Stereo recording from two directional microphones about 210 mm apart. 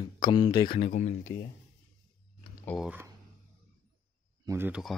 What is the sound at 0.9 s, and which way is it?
Speech, 35° left (ahead or behind).